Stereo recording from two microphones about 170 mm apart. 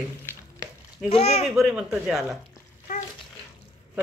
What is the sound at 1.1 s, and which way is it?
Speech, 35° left (ahead or behind).